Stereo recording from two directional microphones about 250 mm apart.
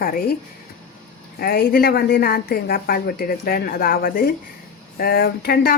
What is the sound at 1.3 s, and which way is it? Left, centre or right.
Speech, left.